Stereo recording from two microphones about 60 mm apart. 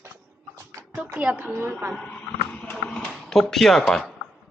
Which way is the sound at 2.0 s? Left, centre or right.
Centre.